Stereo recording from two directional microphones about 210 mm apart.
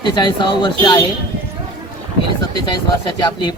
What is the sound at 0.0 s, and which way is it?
Speech, 20° left (ahead or behind).